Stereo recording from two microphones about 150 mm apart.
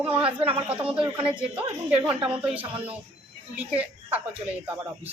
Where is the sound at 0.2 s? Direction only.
10° right (ahead or behind).